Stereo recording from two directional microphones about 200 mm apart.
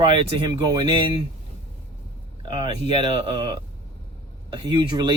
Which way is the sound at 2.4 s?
25° right (ahead or behind).